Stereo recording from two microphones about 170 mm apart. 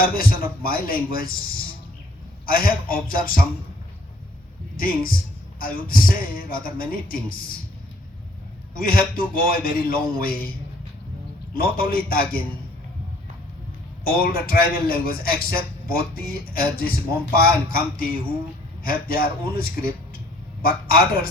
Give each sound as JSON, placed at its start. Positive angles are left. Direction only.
{"t": 0.2, "sound": "a man's voice", "side_deg": 60}
{"t": 4.8, "sound": "a man's voice", "side_deg": 60}
{"t": 8.7, "sound": "a man's voice", "side_deg": 55}
{"t": 11.5, "sound": "a man's voice", "side_deg": 60}
{"t": 14.0, "sound": "a man's voice", "side_deg": 60}